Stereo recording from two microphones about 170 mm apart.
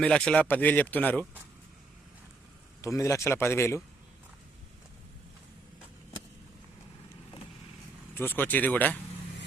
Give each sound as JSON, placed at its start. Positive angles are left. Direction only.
{"t": 0.0, "sound": "speech", "side_deg": 5}
{"t": 2.8, "sound": "speech", "side_deg": 15}
{"t": 8.1, "sound": "speech", "side_deg": 10}